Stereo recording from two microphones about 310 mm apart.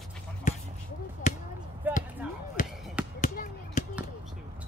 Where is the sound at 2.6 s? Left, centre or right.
Left.